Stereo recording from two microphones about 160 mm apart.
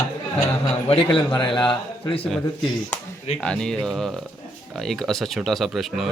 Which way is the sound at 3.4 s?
5° left (ahead or behind).